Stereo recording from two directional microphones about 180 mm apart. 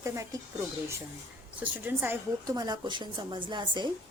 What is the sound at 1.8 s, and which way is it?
Speech, 10° right (ahead or behind).